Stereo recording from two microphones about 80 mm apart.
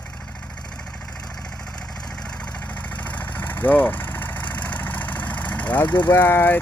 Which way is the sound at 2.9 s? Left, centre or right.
Centre.